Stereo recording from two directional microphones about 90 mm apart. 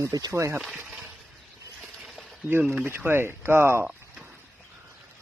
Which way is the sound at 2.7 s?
25° right (ahead or behind).